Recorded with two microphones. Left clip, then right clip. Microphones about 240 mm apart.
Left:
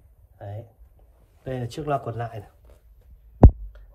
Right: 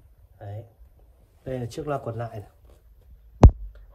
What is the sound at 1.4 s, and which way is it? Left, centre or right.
Speech, centre.